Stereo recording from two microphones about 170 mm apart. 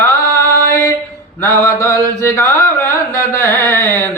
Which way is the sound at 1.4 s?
15° left (ahead or behind).